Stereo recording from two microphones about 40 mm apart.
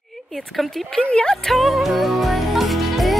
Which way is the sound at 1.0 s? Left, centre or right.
Left.